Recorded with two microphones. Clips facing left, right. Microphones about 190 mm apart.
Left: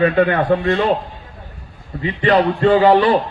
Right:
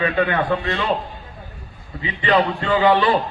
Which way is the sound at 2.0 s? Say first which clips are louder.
Left 4 dB; 40° left (ahead or behind).